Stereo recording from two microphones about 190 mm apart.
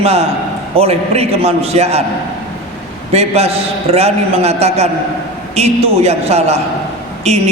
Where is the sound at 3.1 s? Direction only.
35° right (ahead or behind).